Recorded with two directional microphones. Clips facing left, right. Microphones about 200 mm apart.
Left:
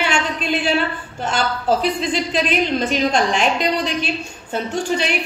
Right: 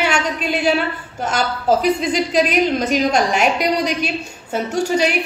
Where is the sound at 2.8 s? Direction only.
40° right (ahead or behind).